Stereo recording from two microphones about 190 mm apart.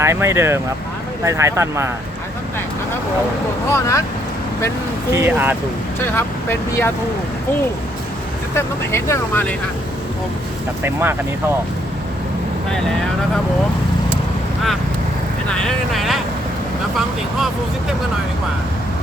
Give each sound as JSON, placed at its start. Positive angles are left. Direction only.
{"t": 0.0, "sound": "speech", "side_deg": -15}
{"t": 3.7, "sound": "speech", "side_deg": 15}
{"t": 5.1, "sound": "speech", "side_deg": -10}
{"t": 6.0, "sound": "speech", "side_deg": 10}
{"t": 8.5, "sound": "speech", "side_deg": 15}
{"t": 15.4, "sound": "speech", "side_deg": 5}